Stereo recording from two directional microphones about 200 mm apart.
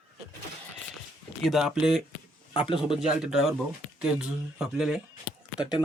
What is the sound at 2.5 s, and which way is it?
Speech, 25° left (ahead or behind).